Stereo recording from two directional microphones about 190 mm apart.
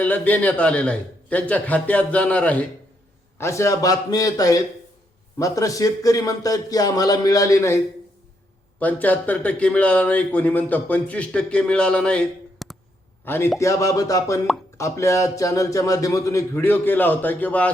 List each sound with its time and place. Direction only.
0.0 s a man's voice: 10° left (ahead or behind)
8.8 s a man's voice: 10° left (ahead or behind)